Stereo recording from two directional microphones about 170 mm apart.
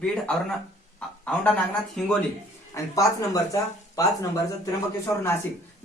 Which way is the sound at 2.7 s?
20° left (ahead or behind).